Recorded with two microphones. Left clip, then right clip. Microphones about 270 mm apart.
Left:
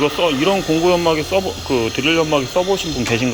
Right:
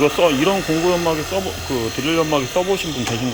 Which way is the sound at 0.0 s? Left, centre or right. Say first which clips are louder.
Right 1 dB; centre.